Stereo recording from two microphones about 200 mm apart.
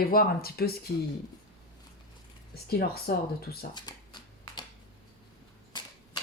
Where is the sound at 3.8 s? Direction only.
20° left (ahead or behind).